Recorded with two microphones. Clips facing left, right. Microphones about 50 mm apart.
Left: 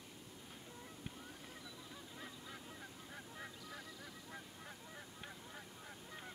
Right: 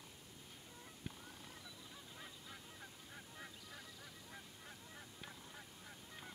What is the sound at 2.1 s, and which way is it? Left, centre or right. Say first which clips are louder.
Honk: left 4 dB; centre.